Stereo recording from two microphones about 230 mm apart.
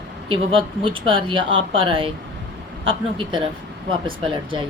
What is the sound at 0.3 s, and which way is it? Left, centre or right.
Speech, right.